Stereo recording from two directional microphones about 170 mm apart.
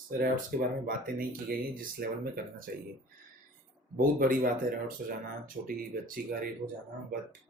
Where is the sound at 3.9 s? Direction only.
55° right (ahead or behind).